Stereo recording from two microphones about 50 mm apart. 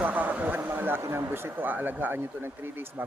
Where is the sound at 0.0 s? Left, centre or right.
Right.